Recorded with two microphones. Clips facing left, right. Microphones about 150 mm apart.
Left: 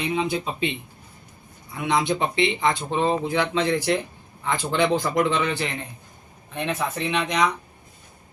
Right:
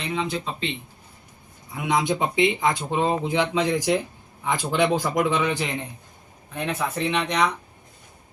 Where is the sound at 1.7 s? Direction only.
15° right (ahead or behind).